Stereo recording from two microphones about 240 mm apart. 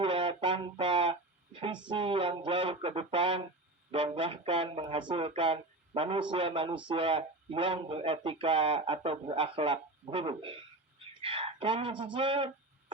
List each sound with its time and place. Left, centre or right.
0.0 s a man's voice: right